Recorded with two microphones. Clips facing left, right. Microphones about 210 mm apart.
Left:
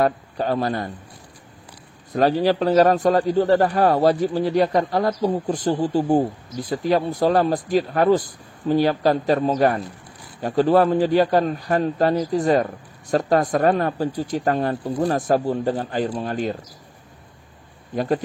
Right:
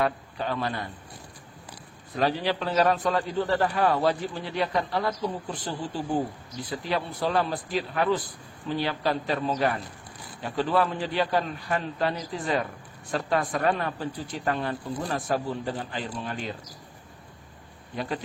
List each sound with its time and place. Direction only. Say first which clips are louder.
0.0 s a man's voice: left 7 dB; 40° left (ahead or behind)
2.1 s a man's voice: left 8 dB; 40° left (ahead or behind)
17.9 s speech: left 10 dB; 45° left (ahead or behind)